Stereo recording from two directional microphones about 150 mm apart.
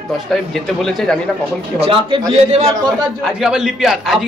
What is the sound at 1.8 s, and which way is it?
Speech, 40° right (ahead or behind).